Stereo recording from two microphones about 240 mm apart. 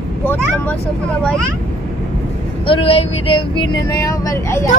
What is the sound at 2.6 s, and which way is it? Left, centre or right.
Speech, left.